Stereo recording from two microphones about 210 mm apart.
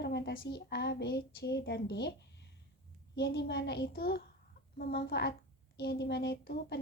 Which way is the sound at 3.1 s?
55° left (ahead or behind).